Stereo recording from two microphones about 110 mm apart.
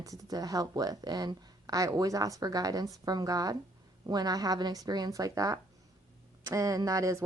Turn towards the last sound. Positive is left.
turn(degrees=-30)  # may be behind; listen again after turning